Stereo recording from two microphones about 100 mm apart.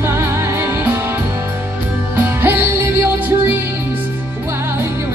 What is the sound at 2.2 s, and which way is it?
Music, 25° right (ahead or behind).